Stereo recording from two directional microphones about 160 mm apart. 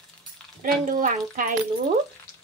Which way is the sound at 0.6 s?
60° right (ahead or behind).